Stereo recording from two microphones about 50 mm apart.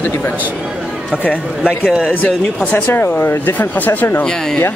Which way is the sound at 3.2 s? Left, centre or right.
Left.